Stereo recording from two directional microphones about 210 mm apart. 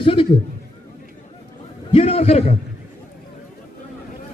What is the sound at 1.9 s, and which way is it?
Speech, 30° left (ahead or behind).